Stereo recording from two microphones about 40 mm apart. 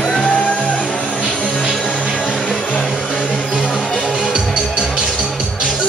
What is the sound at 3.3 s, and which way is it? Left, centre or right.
Music, centre.